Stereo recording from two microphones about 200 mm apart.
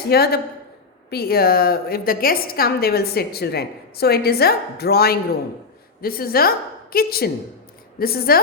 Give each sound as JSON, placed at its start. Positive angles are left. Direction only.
{"t": 0.1, "sound": "a woman's voice", "side_deg": 50}